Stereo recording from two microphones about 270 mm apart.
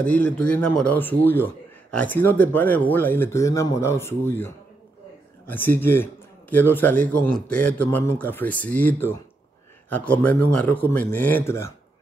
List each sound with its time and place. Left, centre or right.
0.0 s a man's voice: centre
5.5 s a man's voice: centre